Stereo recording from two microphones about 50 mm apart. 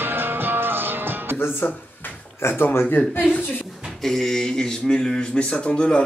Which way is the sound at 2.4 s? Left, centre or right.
Left.